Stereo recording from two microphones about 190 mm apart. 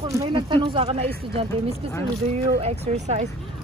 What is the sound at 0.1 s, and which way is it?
Speech, 20° right (ahead or behind).